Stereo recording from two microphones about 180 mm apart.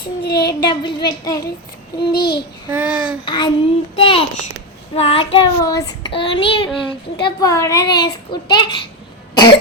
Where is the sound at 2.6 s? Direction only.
10° right (ahead or behind).